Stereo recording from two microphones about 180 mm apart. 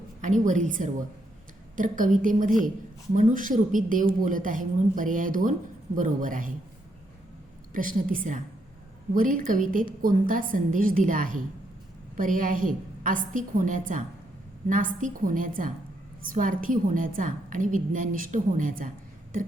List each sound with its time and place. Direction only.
0.2 s speech: 45° right (ahead or behind)
7.7 s speech: 50° right (ahead or behind)